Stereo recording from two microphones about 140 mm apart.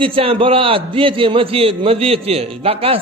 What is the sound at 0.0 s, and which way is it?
A man's voice, 40° right (ahead or behind).